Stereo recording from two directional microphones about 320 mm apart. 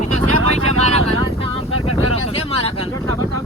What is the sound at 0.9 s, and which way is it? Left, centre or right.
Vehicle, centre.